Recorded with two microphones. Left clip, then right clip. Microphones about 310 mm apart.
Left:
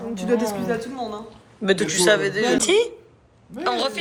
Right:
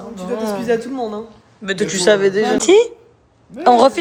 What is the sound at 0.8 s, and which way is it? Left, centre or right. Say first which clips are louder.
Speech: right 6 dB; right.